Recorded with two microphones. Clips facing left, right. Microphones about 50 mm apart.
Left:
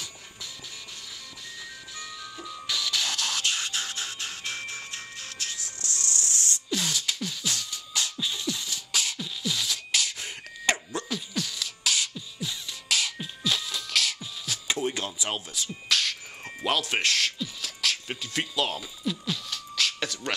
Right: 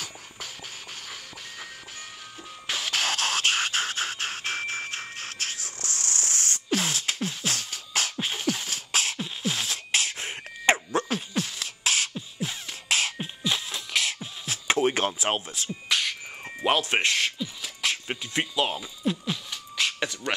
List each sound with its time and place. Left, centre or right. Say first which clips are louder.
2.4 s music: even; right
5.9 s beatboxing: even; right
15.9 s music: even; centre
19.0 s beatboxing: right 3 dB; right